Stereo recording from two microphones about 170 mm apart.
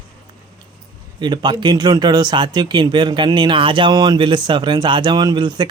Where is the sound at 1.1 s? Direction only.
25° right (ahead or behind).